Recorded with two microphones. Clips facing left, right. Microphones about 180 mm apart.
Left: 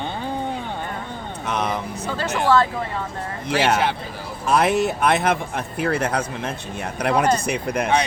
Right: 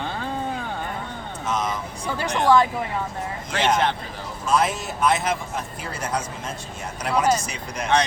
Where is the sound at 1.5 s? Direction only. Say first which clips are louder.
Left 2 dB; 65° left (ahead or behind).